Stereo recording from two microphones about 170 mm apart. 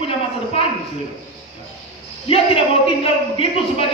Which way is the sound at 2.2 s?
35° left (ahead or behind).